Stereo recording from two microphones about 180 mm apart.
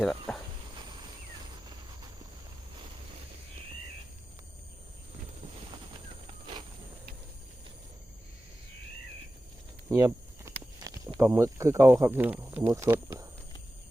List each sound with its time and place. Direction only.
0.3 s insect: centre (ahead or behind)
9.9 s walk: 15° right (ahead or behind)
11.2 s speech: 15° right (ahead or behind)